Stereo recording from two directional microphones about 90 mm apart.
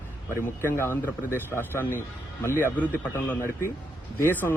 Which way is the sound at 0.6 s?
25° left (ahead or behind).